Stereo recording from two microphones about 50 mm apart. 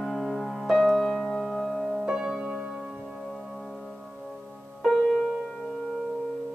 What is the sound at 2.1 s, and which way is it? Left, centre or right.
Music, centre.